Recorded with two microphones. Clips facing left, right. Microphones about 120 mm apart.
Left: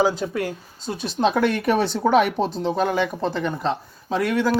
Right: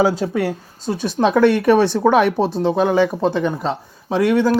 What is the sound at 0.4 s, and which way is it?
Speech, 55° right (ahead or behind).